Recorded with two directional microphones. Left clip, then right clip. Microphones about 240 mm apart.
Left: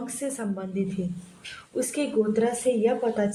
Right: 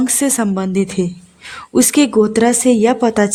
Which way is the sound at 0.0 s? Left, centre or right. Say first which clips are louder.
Right 15 dB; right.